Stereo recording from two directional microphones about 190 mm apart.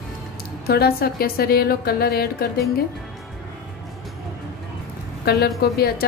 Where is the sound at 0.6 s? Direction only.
55° left (ahead or behind).